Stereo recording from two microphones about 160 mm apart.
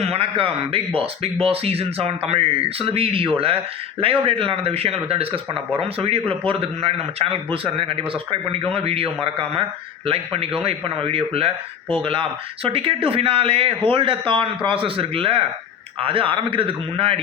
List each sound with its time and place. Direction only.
0.0 s speech: 35° right (ahead or behind)